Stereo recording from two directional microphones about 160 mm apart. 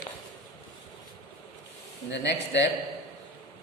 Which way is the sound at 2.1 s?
90° left.